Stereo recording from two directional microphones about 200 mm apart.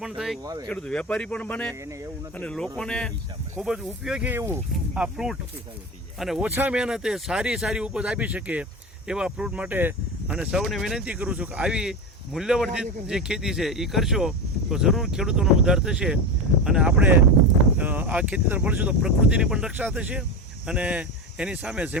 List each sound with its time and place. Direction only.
0.0 s speech: centre (ahead or behind)
0.4 s speech: 20° right (ahead or behind)
0.7 s speech: 5° left (ahead or behind)
1.8 s speech: 15° right (ahead or behind)
2.3 s speech: 5° left (ahead or behind)